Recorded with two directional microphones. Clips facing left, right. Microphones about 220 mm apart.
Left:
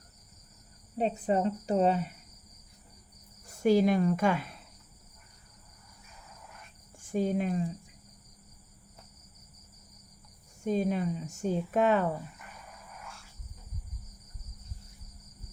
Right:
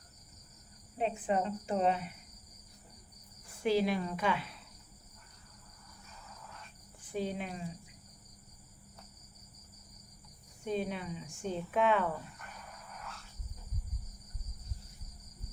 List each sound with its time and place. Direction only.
0.9 s speech: 35° left (ahead or behind)
3.4 s speech: 45° left (ahead or behind)
7.0 s speech: 45° left (ahead or behind)
10.6 s speech: 40° left (ahead or behind)
12.9 s a sound: 5° left (ahead or behind)